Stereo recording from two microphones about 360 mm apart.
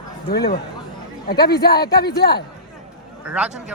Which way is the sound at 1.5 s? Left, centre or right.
Left.